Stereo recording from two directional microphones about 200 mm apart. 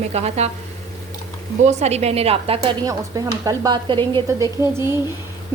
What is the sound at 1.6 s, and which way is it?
A woman's voice, 35° right (ahead or behind).